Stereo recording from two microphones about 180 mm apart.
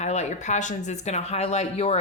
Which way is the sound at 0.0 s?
40° left (ahead or behind).